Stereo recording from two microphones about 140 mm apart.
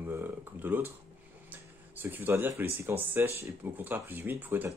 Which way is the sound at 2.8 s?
15° right (ahead or behind).